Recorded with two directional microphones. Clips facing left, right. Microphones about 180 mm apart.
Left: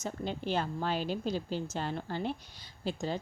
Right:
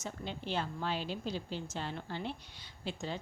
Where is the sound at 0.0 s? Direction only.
45° left (ahead or behind).